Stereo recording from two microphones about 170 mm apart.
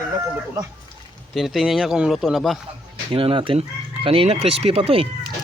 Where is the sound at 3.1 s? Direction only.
30° right (ahead or behind).